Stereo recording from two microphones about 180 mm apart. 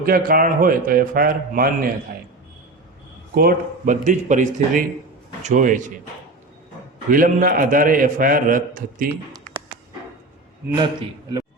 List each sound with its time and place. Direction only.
0.0 s a man's voice: 55° right (ahead or behind)
3.3 s a man's voice: 50° right (ahead or behind)
7.1 s a man's voice: 45° right (ahead or behind)
10.8 s speech: 25° right (ahead or behind)